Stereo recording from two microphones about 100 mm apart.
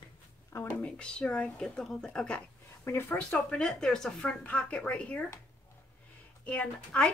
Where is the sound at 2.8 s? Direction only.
25° left (ahead or behind).